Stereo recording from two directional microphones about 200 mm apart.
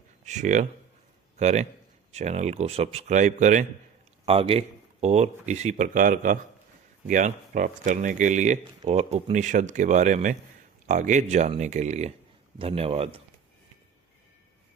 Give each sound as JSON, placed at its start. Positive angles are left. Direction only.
{"t": 0.3, "sound": "a man's voice", "side_deg": -35}
{"t": 4.3, "sound": "a man's voice", "side_deg": -30}